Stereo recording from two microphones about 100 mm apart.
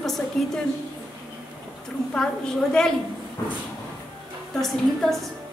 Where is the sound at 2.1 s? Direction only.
5° left (ahead or behind).